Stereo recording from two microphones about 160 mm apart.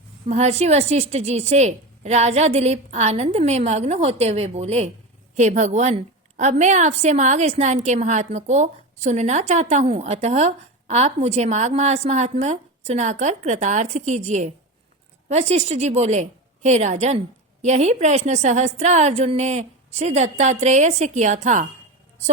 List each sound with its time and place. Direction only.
0.3 s a woman's voice: 40° right (ahead or behind)